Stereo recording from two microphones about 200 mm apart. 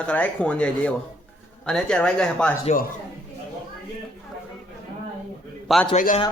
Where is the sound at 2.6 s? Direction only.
40° left (ahead or behind).